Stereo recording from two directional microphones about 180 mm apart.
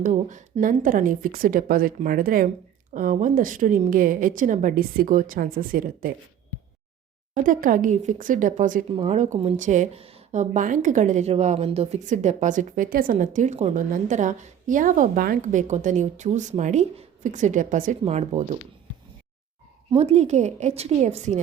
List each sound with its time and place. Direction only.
0.0 s a woman's voice: 45° right (ahead or behind)
7.3 s a woman's voice: 45° right (ahead or behind)
19.9 s a woman's voice: 35° right (ahead or behind)